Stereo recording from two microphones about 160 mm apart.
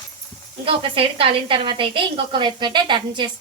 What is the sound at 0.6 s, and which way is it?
A woman's voice, 35° right (ahead or behind).